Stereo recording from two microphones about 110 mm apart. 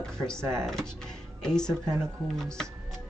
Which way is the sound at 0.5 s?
5° left (ahead or behind).